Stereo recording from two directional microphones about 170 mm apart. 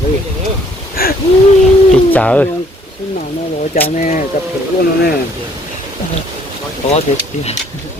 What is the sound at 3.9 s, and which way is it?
Speech, 50° left (ahead or behind).